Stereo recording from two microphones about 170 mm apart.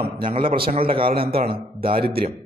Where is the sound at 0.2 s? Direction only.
30° right (ahead or behind).